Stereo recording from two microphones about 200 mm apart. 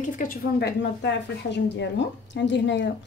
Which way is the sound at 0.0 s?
40° left (ahead or behind).